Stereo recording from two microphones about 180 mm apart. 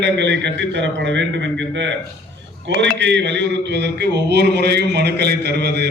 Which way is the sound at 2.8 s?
80° right.